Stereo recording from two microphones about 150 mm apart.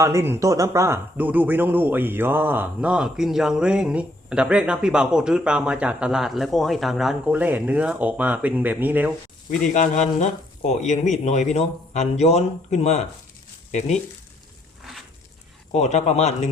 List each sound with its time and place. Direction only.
0.0 s speech: 15° right (ahead or behind)
9.7 s speech: 55° left (ahead or behind)
15.7 s speech: 50° left (ahead or behind)